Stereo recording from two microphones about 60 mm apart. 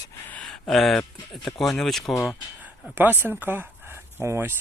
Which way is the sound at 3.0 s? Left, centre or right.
Right.